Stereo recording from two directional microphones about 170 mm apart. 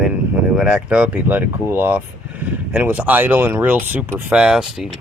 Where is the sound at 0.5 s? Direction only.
5° right (ahead or behind).